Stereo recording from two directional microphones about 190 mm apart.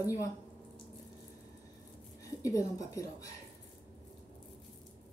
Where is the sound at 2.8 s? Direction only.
15° left (ahead or behind).